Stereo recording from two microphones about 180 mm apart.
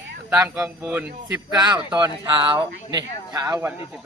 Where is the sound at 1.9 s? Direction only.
25° right (ahead or behind).